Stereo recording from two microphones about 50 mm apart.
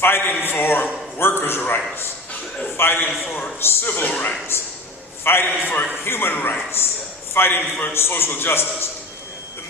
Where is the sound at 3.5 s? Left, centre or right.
Left.